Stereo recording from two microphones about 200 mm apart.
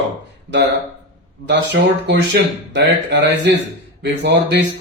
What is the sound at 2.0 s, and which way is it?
A man's voice, 60° right (ahead or behind).